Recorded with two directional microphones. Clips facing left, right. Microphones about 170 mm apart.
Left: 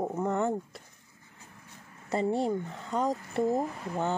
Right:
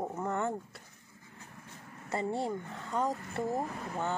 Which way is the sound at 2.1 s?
15° left (ahead or behind).